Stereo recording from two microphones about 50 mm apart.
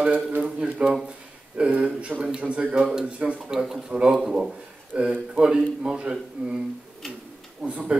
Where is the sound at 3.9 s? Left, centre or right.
Centre.